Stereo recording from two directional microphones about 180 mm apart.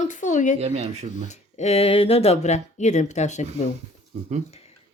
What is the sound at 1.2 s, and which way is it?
Speech, 40° left (ahead or behind).